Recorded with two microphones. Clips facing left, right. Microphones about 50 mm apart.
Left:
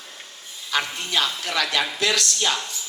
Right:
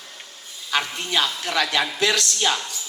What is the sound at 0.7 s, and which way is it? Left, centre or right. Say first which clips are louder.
Speech: right 1 dB; right.